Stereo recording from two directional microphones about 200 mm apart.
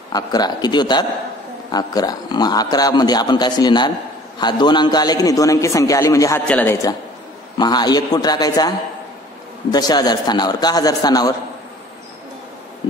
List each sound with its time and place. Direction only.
0.1 s a man's voice: 20° left (ahead or behind)